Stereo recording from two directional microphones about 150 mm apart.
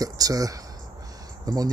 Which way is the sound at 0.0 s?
25° right (ahead or behind).